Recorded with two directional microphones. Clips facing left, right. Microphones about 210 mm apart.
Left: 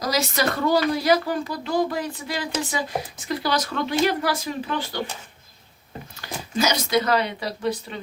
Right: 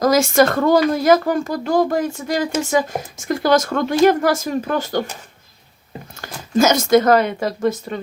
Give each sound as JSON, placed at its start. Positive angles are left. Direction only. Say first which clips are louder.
{"t": 0.0, "sound": "speech", "louder": "right 10 dB", "side_deg": -50}
{"t": 6.1, "sound": "speech", "louder": "right 8 dB", "side_deg": -50}